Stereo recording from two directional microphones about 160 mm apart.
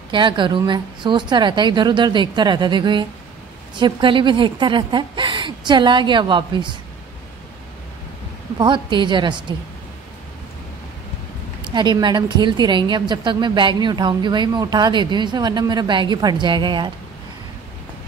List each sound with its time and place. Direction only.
0.1 s a woman's voice: 30° right (ahead or behind)
8.5 s a woman's voice: 30° right (ahead or behind)
11.6 s a woman's voice: 30° right (ahead or behind)